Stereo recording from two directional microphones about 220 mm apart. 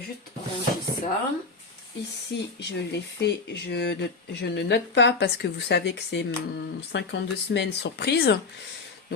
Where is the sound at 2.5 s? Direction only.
50° left (ahead or behind).